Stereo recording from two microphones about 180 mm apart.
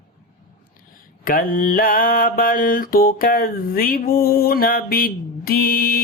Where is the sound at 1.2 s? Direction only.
50° left (ahead or behind).